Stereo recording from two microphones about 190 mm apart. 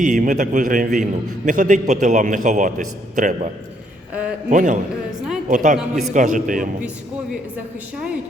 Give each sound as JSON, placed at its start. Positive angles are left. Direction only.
{"t": 0.0, "sound": "a man's voice", "side_deg": -40}
{"t": 4.1, "sound": "a man's voice", "side_deg": -5}
{"t": 4.4, "sound": "a man's voice", "side_deg": -40}